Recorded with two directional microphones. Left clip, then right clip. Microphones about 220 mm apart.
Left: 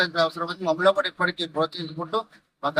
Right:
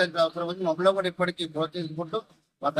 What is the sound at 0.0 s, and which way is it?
A man's voice, 10° right (ahead or behind).